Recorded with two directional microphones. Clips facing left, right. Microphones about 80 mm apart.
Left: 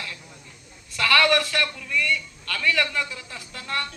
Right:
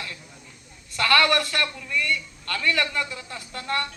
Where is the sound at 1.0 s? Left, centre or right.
Right.